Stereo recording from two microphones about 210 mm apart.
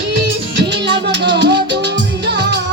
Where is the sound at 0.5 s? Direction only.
60° right (ahead or behind).